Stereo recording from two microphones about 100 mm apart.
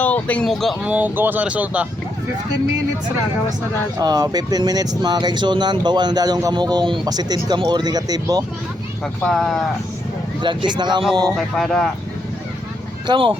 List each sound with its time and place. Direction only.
0.0 s speech: 15° left (ahead or behind)
0.4 s speech: 5° left (ahead or behind)
0.8 s speech: 15° right (ahead or behind)
3.9 s speech: 40° right (ahead or behind)
9.2 s speech: 5° left (ahead or behind)
10.4 s speech: 55° right (ahead or behind)
11.3 s speech: 5° left (ahead or behind)
13.1 s speech: 60° right (ahead or behind)